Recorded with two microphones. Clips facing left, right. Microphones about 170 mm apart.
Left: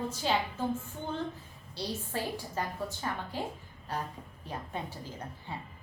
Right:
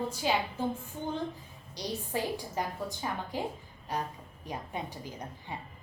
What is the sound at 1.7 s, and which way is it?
A woman's voice, 15° right (ahead or behind).